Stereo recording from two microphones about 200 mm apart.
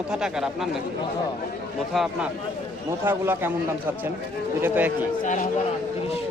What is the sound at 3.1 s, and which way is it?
Speech, 10° right (ahead or behind).